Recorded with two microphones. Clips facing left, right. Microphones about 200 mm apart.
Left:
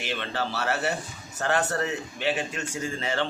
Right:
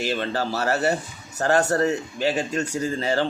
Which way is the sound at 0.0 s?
40° right (ahead or behind).